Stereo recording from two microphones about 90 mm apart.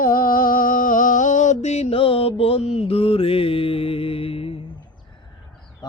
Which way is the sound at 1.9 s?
90° left.